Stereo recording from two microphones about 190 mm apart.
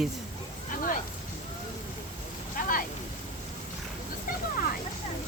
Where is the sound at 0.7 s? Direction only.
45° left (ahead or behind).